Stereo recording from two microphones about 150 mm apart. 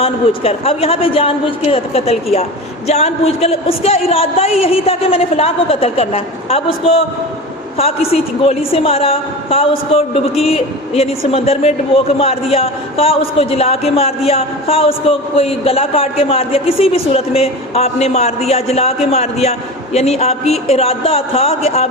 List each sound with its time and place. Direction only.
0.0 s a man's voice: 40° left (ahead or behind)